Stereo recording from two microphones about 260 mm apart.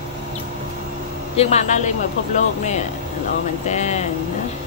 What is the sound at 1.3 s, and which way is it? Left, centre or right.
Speech, left.